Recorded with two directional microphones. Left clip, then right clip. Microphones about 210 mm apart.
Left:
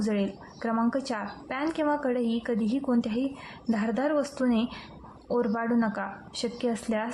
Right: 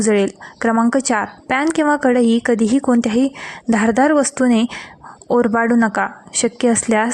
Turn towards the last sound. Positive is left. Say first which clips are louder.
# right 14 dB
turn(degrees=-40)  # may be behind; listen again after turning